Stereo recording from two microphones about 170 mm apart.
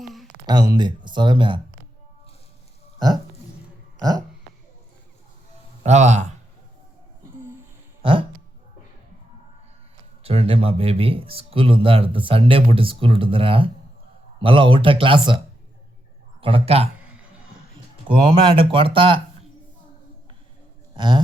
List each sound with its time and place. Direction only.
0.4 s speech: 25° right (ahead or behind)
5.8 s a man's voice: 40° right (ahead or behind)
10.2 s speech: 35° right (ahead or behind)
16.4 s speech: 35° right (ahead or behind)
17.0 s a sound: 5° right (ahead or behind)
18.1 s speech: 30° right (ahead or behind)
20.9 s a sound: 25° right (ahead or behind)